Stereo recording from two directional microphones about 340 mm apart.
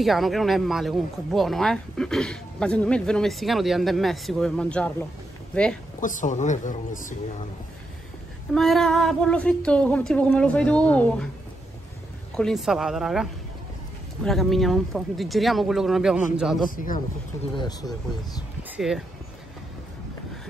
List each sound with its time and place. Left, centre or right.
0.0 s speech: centre
5.9 s speech: left
8.5 s speech: centre
12.4 s speech: centre
16.7 s speech: left
17.6 s speech: centre
18.8 s speech: centre